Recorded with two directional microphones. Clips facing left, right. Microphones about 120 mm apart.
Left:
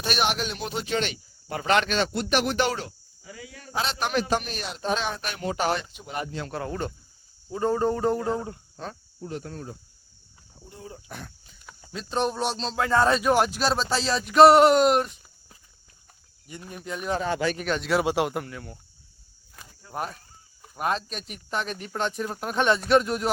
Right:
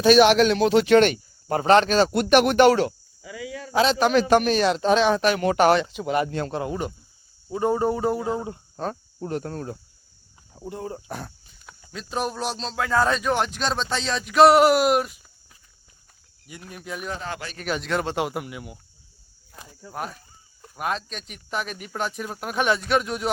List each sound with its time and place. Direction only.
0.0 s speech: 90° right; by 2.1 s 40° right (ahead or behind)
2.3 s speech: 60° right (ahead or behind); by 6.3 s 90° right
6.5 s speech: 15° right (ahead or behind)
8.7 s speech: 45° right (ahead or behind)
10.5 s speech: 70° right (ahead or behind)
10.9 s speech: 40° right (ahead or behind)
11.9 s speech: 5° right (ahead or behind)
16.5 s speech: 5° right (ahead or behind)
18.4 s speech: 15° right (ahead or behind)
19.9 s speech: centre (ahead or behind)